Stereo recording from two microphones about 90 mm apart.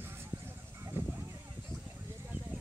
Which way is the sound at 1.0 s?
25° right (ahead or behind).